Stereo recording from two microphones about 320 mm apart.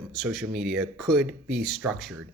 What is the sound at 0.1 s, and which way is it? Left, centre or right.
Speech, centre.